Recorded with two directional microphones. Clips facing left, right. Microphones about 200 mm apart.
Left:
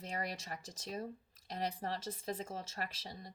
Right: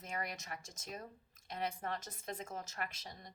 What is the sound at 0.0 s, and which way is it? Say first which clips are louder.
Speech: left 2 dB; 35° left (ahead or behind).